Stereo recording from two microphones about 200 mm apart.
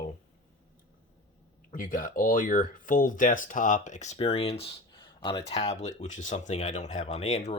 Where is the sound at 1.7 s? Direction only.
45° left (ahead or behind).